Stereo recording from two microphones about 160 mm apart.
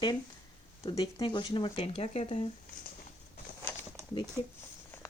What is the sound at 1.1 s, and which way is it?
Speech, 30° left (ahead or behind).